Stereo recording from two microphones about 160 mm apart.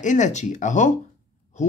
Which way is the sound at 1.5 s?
45° left (ahead or behind).